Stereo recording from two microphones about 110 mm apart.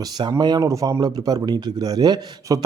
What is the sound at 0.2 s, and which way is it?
Speech, 40° right (ahead or behind).